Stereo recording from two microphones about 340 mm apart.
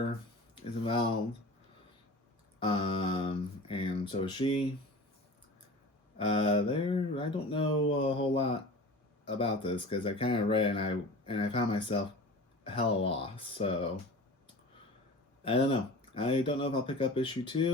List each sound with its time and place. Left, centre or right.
0.1 s a sound: centre
2.6 s speech: centre
6.1 s speech: centre
16.1 s speech: centre